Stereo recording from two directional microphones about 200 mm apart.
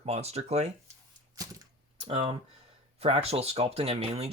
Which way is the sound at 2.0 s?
30° right (ahead or behind).